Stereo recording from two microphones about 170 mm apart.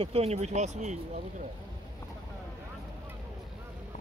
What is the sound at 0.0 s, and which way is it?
Speech, 35° right (ahead or behind).